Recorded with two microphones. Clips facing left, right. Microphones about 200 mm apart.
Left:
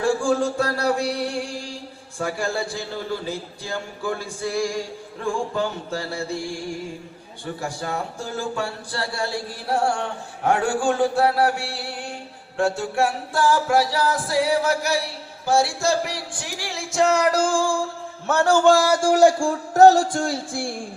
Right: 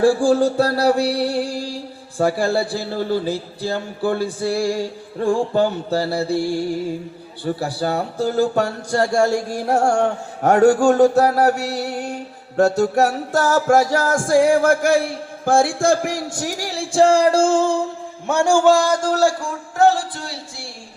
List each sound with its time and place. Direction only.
0.0 s a sound: 35° right (ahead or behind)
7.6 s a man's voice: 35° right (ahead or behind); by 18.7 s 10° right (ahead or behind)
18.7 s speech: 5° left (ahead or behind)
19.4 s a man's voice: 35° left (ahead or behind)